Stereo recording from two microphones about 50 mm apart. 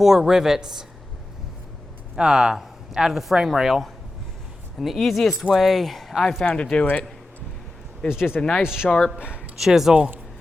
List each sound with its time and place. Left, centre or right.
0.0 s speech: centre
2.1 s speech: centre
6.4 s speech: centre
8.1 s speech: centre
8.4 s speech: centre
8.6 s speech: centre
8.9 s speech: centre
9.1 s speech: right
9.6 s speech: centre